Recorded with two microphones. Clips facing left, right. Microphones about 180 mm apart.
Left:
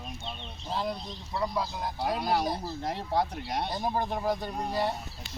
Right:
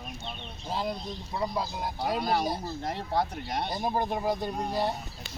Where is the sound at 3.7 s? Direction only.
10° right (ahead or behind).